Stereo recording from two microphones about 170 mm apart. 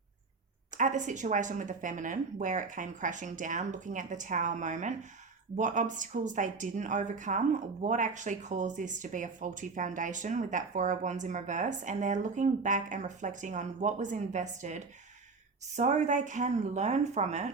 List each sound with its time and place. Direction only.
0.8 s speech: 45° right (ahead or behind)